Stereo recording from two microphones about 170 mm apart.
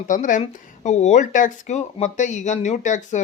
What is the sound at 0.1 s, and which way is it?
Speech, 50° left (ahead or behind).